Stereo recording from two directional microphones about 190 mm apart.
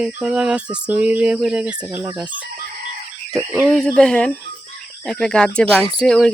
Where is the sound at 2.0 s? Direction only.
20° right (ahead or behind).